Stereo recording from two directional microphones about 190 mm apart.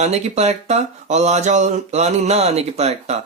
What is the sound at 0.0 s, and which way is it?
Speech, 35° right (ahead or behind).